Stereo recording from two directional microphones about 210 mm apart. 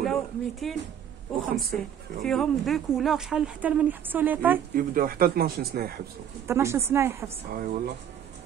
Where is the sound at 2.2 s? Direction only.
Centre (ahead or behind).